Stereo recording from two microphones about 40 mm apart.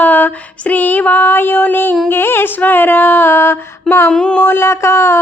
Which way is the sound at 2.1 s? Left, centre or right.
Left.